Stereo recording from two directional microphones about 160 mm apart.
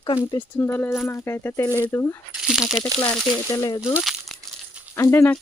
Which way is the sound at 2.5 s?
5° right (ahead or behind).